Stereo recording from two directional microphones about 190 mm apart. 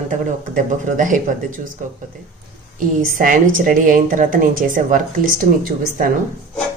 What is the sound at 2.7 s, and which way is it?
A woman's voice, 45° right (ahead or behind).